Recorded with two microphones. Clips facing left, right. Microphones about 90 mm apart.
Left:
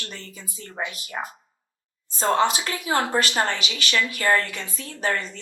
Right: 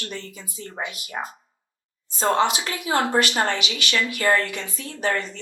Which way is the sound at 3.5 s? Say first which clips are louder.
Even; 35° left (ahead or behind).